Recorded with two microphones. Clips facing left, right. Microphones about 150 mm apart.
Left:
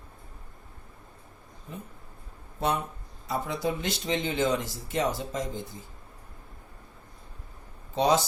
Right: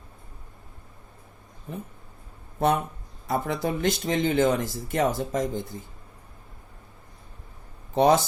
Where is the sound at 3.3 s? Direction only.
55° right (ahead or behind).